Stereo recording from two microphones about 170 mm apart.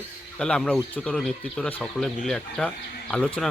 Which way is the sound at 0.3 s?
5° left (ahead or behind).